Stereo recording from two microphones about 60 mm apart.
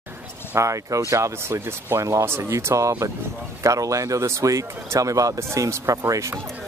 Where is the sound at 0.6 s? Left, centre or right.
Right.